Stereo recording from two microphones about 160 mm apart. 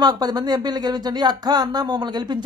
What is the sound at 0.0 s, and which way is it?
Speech, 25° right (ahead or behind).